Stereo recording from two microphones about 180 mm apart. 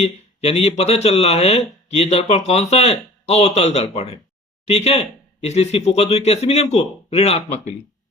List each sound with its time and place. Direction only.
0.0 s speech: 35° left (ahead or behind)